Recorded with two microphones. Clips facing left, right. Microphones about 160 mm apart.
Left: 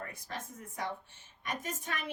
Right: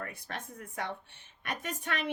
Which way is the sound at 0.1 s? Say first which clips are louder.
Right 1 dB; 65° right (ahead or behind).